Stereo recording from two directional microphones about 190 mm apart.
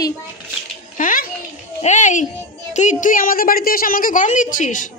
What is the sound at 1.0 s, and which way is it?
A child's voice, 45° left (ahead or behind).